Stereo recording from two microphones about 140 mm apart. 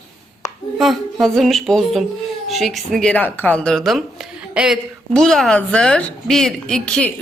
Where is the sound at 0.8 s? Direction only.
Centre (ahead or behind).